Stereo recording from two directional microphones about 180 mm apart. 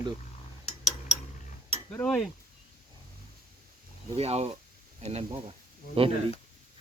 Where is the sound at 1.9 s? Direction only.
5° left (ahead or behind).